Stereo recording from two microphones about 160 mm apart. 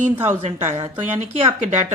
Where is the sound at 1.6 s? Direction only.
50° right (ahead or behind).